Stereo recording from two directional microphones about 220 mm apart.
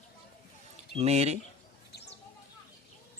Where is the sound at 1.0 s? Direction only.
30° right (ahead or behind).